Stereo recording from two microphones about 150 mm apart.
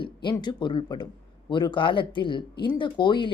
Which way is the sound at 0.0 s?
30° left (ahead or behind).